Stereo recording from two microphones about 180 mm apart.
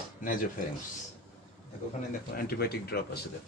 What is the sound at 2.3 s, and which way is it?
Speech, 60° left (ahead or behind).